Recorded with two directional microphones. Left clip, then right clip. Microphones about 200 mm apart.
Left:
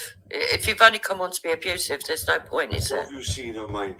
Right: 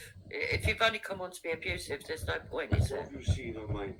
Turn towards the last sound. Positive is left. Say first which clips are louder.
# left 9 dB
turn(degrees=40)  # may be behind; listen again after turning